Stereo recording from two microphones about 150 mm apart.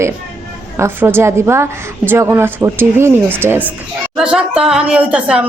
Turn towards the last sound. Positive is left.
turn(degrees=-5)  # may be behind; listen again after turning